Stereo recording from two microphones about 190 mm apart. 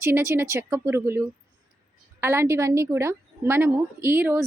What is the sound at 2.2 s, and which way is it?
A woman's voice, 15° right (ahead or behind).